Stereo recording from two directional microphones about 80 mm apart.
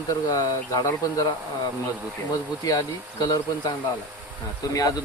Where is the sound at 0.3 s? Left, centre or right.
Left.